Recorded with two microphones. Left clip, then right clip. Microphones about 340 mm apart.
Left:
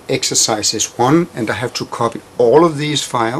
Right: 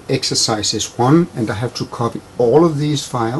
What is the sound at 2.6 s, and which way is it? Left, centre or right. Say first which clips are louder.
Speech: left 2 dB; centre.